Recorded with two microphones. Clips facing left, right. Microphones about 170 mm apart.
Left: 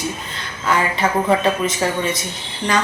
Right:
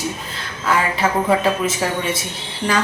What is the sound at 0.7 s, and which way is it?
A man's voice, 5° right (ahead or behind).